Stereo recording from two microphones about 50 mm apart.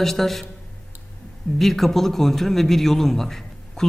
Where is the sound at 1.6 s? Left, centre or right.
Centre.